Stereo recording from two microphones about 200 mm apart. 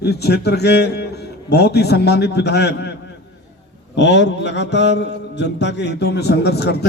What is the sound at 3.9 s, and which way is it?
Mantra, 60° left (ahead or behind).